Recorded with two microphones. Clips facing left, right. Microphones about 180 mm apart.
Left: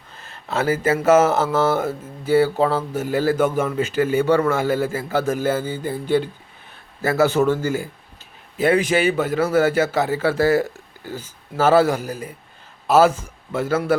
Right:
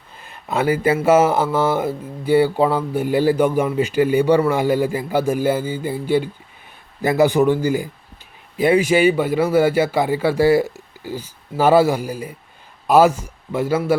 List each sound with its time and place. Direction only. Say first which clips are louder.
0.2 s speech: right 2 dB; 15° right (ahead or behind)